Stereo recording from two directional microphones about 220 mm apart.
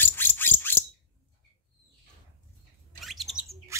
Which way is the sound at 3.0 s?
Centre (ahead or behind).